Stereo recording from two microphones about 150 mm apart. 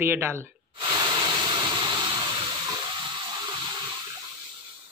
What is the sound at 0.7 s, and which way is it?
Breathing, 30° right (ahead or behind).